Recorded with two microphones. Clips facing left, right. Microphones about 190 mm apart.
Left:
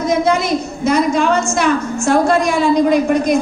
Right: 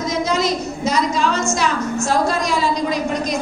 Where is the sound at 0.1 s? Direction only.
55° left (ahead or behind).